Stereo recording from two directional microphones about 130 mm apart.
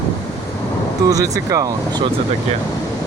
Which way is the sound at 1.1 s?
25° right (ahead or behind).